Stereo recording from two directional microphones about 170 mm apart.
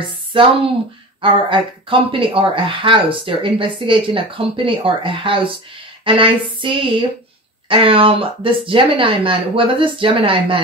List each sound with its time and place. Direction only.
0.3 s speech: 30° right (ahead or behind)